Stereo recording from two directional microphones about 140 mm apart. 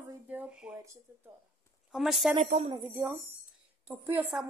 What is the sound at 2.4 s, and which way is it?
Speech, 55° right (ahead or behind).